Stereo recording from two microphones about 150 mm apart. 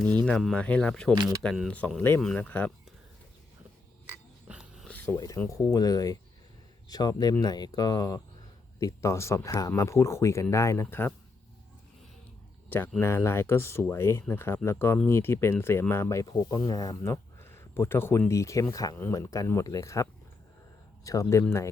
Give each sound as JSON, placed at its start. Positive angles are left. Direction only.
{"t": 0.3, "sound": "speech", "side_deg": 5}
{"t": 4.4, "sound": "music", "side_deg": -5}
{"t": 4.9, "sound": "speech", "side_deg": 10}
{"t": 12.6, "sound": "a sound", "side_deg": 10}
{"t": 13.0, "sound": "speech", "side_deg": 15}